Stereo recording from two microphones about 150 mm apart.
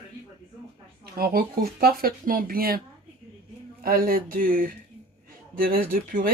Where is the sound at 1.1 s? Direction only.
85° right.